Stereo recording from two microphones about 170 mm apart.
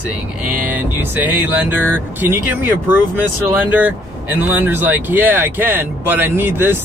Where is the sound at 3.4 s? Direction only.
10° right (ahead or behind).